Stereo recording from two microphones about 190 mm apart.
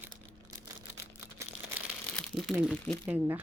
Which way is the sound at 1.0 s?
15° right (ahead or behind).